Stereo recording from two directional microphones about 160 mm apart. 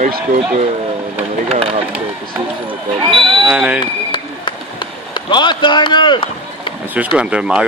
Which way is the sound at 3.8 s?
30° left (ahead or behind).